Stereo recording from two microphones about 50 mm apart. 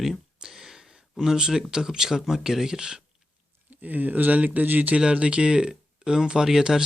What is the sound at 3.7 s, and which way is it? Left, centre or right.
Speech, right.